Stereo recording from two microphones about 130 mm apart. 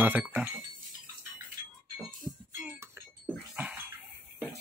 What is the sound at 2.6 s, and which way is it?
Music, 15° right (ahead or behind).